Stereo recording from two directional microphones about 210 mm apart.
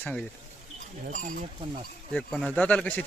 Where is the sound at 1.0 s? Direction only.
40° right (ahead or behind).